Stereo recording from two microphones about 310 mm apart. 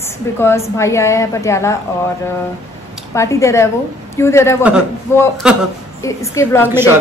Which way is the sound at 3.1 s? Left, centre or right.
Centre.